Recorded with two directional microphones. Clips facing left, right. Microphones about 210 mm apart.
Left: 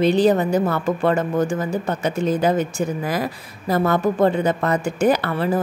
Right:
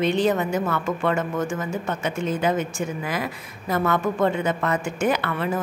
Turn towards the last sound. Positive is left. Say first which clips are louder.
# left 5 dB
turn(degrees=35)  # may be behind; listen again after turning